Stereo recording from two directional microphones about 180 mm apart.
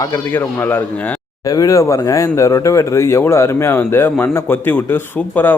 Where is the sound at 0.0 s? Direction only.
10° left (ahead or behind).